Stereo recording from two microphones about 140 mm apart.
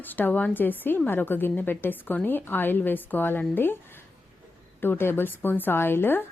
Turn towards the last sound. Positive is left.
turn(degrees=15)  # may be behind; listen again after turning